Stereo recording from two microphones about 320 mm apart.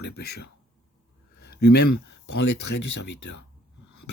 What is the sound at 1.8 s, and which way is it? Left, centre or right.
Speech, left.